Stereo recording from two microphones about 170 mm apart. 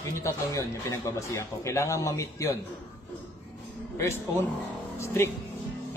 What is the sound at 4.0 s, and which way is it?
A man's voice, 15° left (ahead or behind).